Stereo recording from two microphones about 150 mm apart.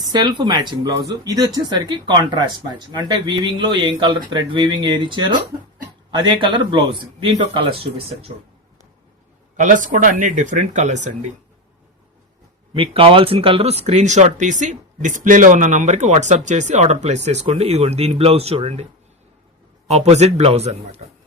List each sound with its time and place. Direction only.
0.1 s speech: 30° right (ahead or behind)
9.6 s speech: 60° right (ahead or behind)
12.7 s speech: 35° right (ahead or behind)
19.9 s speech: 45° right (ahead or behind)